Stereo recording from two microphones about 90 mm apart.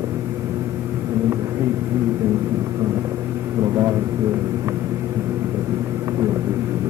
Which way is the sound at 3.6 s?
30° right (ahead or behind).